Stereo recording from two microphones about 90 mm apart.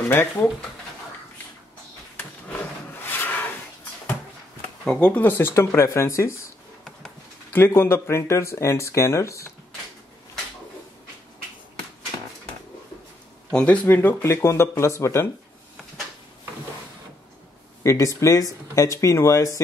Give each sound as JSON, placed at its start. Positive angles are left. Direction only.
{"t": 0.1, "sound": "speech", "side_deg": 25}
{"t": 3.1, "sound": "rub", "side_deg": 20}
{"t": 4.8, "sound": "speech", "side_deg": 15}
{"t": 7.5, "sound": "speech", "side_deg": 25}
{"t": 13.5, "sound": "speech", "side_deg": 10}
{"t": 13.8, "sound": "speech", "side_deg": 20}
{"t": 17.8, "sound": "speech", "side_deg": 35}